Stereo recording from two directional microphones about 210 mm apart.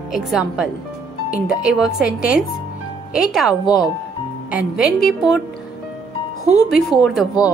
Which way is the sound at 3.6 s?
20° left (ahead or behind).